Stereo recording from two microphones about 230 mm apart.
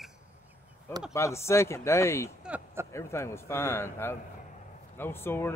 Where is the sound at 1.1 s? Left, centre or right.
Centre.